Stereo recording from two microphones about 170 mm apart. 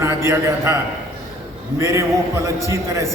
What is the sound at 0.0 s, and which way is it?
Speech, 15° right (ahead or behind).